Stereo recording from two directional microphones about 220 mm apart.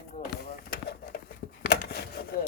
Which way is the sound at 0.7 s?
45° left (ahead or behind).